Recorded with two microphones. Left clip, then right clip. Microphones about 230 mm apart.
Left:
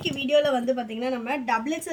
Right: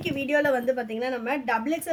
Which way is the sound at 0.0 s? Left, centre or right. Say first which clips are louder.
Left 2 dB; centre.